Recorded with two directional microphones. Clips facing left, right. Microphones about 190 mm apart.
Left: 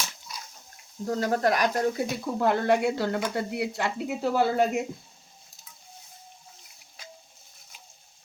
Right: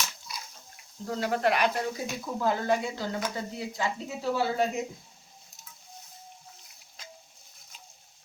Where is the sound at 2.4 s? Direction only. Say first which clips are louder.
Left 4 dB; 65° left (ahead or behind).